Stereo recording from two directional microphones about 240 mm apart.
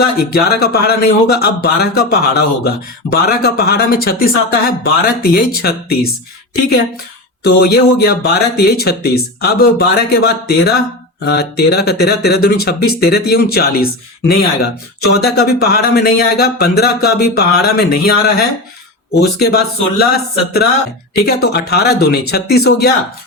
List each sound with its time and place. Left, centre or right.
0.0 s speech: left
7.4 s speech: left